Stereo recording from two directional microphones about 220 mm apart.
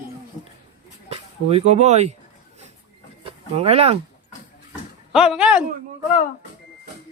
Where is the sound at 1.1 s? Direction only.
30° right (ahead or behind).